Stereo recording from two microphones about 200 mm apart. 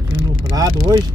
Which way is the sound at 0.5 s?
15° right (ahead or behind).